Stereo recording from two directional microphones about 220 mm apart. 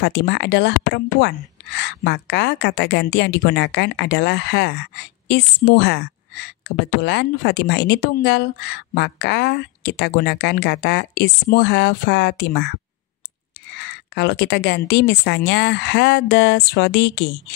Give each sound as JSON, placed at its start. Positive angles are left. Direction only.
{"t": 0.0, "sound": "a woman's voice", "side_deg": 50}
{"t": 13.7, "sound": "a woman's voice", "side_deg": 50}